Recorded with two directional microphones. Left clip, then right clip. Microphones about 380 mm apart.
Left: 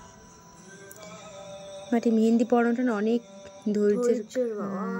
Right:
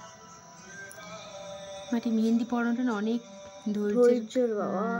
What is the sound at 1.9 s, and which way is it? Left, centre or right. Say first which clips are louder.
Speech: left 6 dB; centre.